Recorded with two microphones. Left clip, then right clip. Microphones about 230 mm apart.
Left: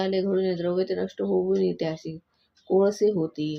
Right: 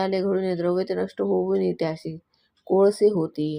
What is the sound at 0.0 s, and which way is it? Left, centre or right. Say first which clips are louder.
Speech: right 1 dB; right.